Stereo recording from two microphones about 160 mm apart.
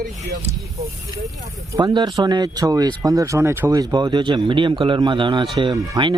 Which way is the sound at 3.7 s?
25° right (ahead or behind).